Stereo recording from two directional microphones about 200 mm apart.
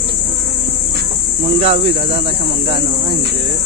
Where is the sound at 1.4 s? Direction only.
30° right (ahead or behind).